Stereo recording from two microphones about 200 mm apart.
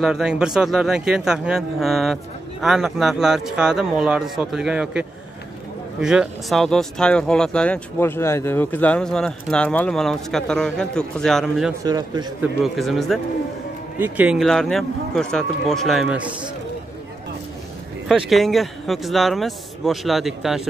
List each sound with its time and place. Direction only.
0.0 s speech: 5° right (ahead or behind)
11.8 s a man's voice: 20° right (ahead or behind)
12.4 s speech: centre (ahead or behind)
18.0 s speech: centre (ahead or behind)